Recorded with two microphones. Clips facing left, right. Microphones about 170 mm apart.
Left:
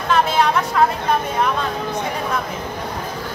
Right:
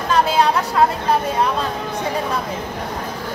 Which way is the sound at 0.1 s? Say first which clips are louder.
Right 1 dB; 35° right (ahead or behind).